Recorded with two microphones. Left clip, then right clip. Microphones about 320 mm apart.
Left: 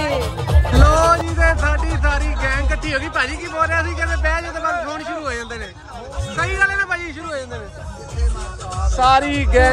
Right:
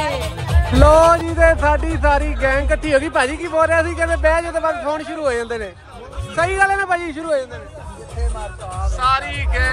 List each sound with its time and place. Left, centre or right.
0.7 s music: centre
8.9 s speech: centre